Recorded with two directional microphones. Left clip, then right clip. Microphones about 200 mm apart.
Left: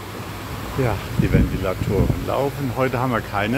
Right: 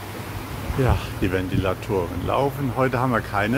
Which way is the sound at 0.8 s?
5° right (ahead or behind).